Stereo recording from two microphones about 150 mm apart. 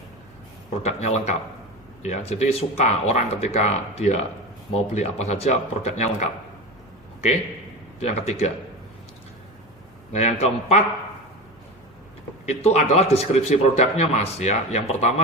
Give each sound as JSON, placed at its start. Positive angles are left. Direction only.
{"t": 0.8, "sound": "a man's voice", "side_deg": 45}
{"t": 7.9, "sound": "a man's voice", "side_deg": 45}
{"t": 10.1, "sound": "a man's voice", "side_deg": 45}
{"t": 12.5, "sound": "a man's voice", "side_deg": 45}